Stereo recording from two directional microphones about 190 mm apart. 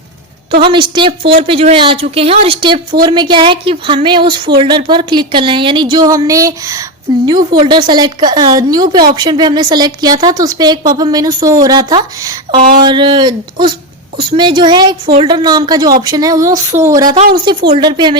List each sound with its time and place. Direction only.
0.6 s a woman's voice: 25° right (ahead or behind)